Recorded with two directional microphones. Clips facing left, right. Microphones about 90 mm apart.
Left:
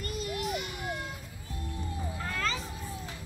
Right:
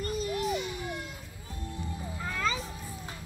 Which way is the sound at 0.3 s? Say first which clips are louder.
Right 1 dB; 30° right (ahead or behind).